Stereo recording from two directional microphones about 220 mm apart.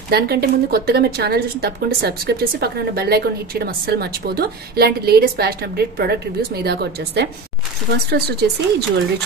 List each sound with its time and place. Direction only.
0.1 s a woman's voice: 45° right (ahead or behind)